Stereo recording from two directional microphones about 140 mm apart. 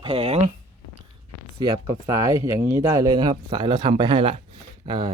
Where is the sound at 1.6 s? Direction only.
35° right (ahead or behind).